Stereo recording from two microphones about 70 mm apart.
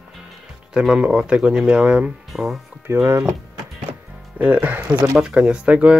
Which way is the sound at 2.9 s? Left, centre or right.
Right.